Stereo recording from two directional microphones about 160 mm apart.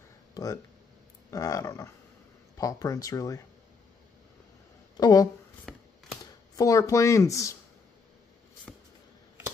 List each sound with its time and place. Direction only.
0.3 s a sound: 20° left (ahead or behind)
1.3 s speech: 20° left (ahead or behind)
4.9 s speech: 25° left (ahead or behind)
5.7 s shuffling cards: 5° left (ahead or behind)
6.5 s speech: 20° left (ahead or behind)
8.7 s a sound: centre (ahead or behind)